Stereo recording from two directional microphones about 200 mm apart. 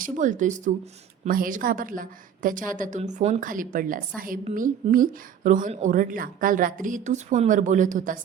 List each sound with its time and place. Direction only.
0.0 s a woman's voice: 40° right (ahead or behind)